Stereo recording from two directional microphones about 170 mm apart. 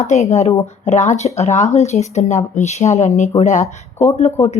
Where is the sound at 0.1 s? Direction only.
40° left (ahead or behind).